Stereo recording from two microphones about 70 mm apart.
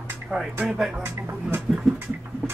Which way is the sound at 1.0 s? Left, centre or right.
Right.